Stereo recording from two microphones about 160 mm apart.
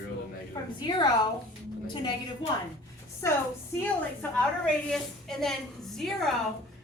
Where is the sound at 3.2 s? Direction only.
20° left (ahead or behind).